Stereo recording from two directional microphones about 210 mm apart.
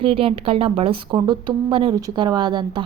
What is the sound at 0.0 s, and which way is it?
A woman's voice, 25° right (ahead or behind).